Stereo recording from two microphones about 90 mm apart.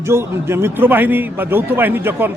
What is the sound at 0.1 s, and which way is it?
A man's voice, 30° right (ahead or behind).